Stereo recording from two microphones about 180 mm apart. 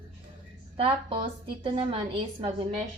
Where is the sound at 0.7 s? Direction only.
30° right (ahead or behind).